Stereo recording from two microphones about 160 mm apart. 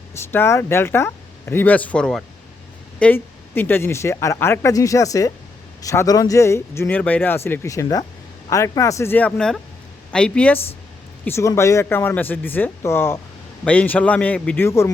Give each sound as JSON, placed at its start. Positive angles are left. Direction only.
{"t": 0.1, "sound": "speech", "side_deg": 15}